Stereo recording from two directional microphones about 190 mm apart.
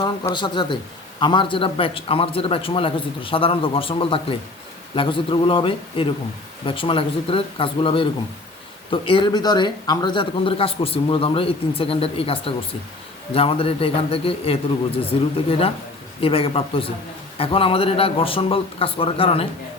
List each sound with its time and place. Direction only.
0.0 s a man's voice: 25° left (ahead or behind)